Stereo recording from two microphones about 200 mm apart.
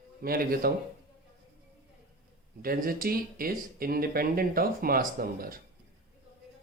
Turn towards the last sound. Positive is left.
turn(degrees=-45)  # may be behind; listen again after turning